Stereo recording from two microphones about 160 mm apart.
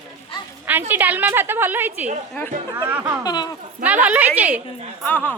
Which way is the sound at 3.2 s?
25° left (ahead or behind).